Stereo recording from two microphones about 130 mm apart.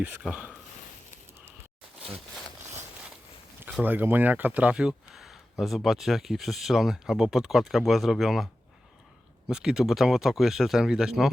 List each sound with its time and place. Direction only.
0.0 s speech: 10° right (ahead or behind)
2.0 s a sound: 50° right (ahead or behind)
3.8 s speech: 15° right (ahead or behind)
9.5 s speech: 5° right (ahead or behind)